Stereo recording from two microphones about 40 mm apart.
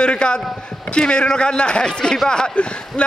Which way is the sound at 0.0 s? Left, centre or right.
Left.